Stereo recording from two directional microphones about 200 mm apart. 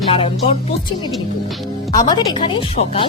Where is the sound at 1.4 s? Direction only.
Centre (ahead or behind).